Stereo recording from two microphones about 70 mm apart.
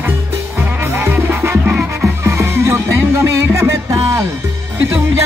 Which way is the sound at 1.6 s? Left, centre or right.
Right.